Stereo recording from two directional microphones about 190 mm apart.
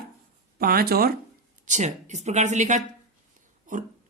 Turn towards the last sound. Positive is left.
turn(degrees=-45)  # may be behind; listen again after turning